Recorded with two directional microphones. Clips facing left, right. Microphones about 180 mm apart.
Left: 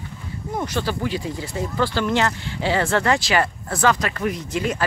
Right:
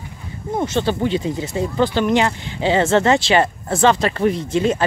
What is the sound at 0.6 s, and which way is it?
Speech, 25° right (ahead or behind).